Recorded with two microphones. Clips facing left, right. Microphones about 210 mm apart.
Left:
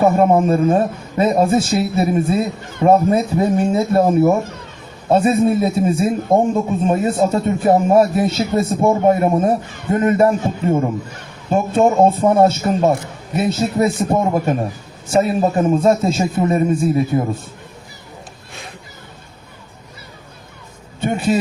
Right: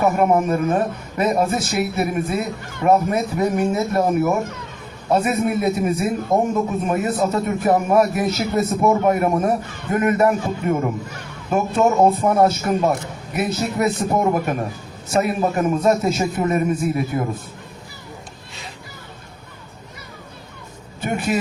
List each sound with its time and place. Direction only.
0.0 s speech: 30° left (ahead or behind)
21.0 s a man's voice: 25° left (ahead or behind)